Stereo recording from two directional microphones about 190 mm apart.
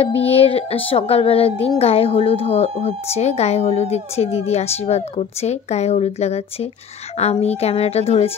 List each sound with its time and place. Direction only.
0.0 s music: 30° left (ahead or behind)